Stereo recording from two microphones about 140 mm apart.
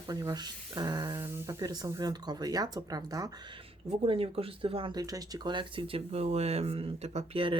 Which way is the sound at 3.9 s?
40° right (ahead or behind).